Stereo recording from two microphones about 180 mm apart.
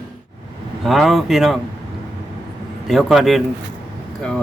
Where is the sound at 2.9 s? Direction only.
Centre (ahead or behind).